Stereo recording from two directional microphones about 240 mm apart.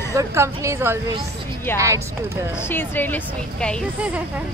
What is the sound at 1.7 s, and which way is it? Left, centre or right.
Speech, centre.